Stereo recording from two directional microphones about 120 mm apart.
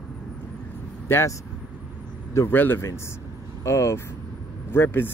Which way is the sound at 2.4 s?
15° left (ahead or behind).